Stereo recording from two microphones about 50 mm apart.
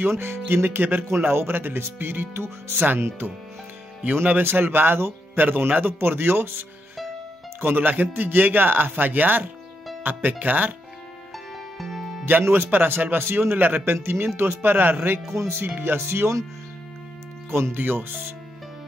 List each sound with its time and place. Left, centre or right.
0.1 s speech: right
4.0 s speech: right
7.6 s a man's voice: right
11.3 s music: centre
12.3 s speech: right
14.0 s speech: right
17.5 s speech: right